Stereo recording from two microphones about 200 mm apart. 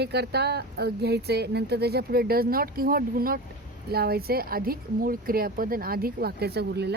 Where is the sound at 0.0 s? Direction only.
55° right (ahead or behind).